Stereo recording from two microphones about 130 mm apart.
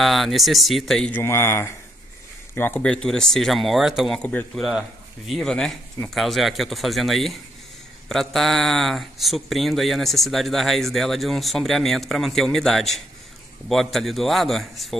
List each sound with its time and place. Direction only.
0.0 s speech: centre (ahead or behind)
1.1 s speech: 20° left (ahead or behind); by 4.2 s 5° right (ahead or behind)
4.2 s speech: 10° left (ahead or behind)
4.6 s speech: centre (ahead or behind)